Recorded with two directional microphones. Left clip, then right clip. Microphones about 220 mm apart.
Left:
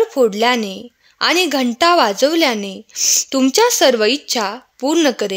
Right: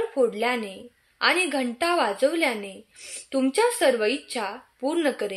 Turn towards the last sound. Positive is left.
turn(degrees=45)  # may be behind; listen again after turning